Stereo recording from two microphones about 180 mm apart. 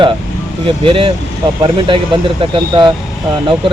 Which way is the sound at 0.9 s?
30° right (ahead or behind).